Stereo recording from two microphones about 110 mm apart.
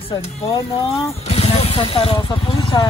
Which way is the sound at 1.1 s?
70° left (ahead or behind).